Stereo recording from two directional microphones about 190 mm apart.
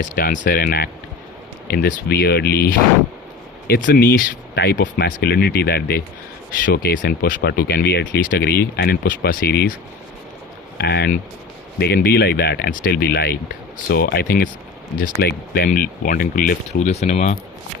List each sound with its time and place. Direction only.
0.0 s speech: 50° left (ahead or behind)
10.8 s speech: 60° left (ahead or behind)
16.9 s speech: 35° left (ahead or behind)